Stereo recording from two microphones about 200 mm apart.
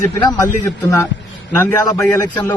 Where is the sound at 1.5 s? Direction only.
15° left (ahead or behind).